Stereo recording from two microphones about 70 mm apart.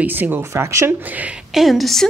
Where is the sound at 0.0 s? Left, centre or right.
Right.